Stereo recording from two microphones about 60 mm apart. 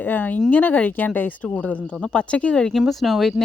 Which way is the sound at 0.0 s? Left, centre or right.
Left.